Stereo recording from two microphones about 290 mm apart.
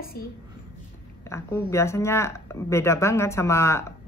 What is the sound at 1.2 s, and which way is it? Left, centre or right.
Speech, centre.